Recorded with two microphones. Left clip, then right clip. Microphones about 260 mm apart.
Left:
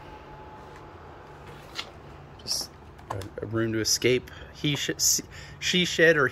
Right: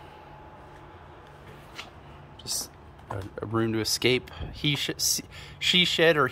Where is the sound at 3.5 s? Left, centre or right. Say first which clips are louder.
Left 1 dB; centre.